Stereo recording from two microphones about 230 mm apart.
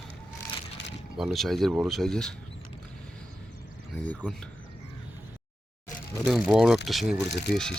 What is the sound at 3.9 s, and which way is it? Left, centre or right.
Speech, centre.